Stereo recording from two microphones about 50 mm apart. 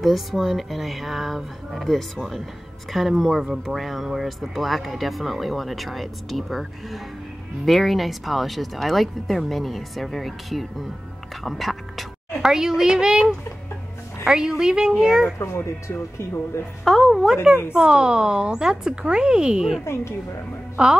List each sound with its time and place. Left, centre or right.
0.0 s speech: centre
11.4 s whispering: centre
12.4 s a woman's voice: centre
14.3 s a woman's voice: centre
15.3 s speech: left
16.8 s a sound: centre
17.7 s a woman's voice: centre
19.8 s speech: left
20.7 s speech: centre